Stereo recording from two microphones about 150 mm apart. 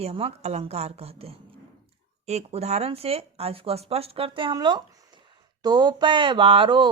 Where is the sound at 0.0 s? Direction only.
40° right (ahead or behind).